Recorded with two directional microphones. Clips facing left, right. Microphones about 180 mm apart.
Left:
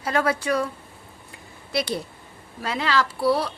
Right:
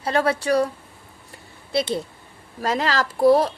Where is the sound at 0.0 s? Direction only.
30° right (ahead or behind).